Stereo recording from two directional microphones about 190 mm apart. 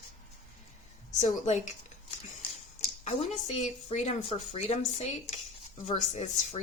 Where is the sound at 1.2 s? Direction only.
35° left (ahead or behind).